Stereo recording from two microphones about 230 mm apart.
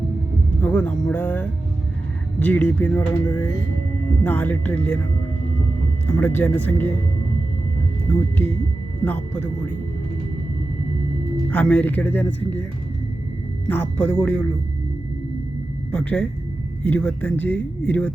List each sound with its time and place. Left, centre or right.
0.6 s speech: centre
6.1 s speech: centre
11.5 s speech: centre
13.7 s speech: centre
15.9 s speech: centre